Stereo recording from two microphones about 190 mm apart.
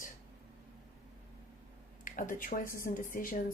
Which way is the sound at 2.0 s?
45° left (ahead or behind).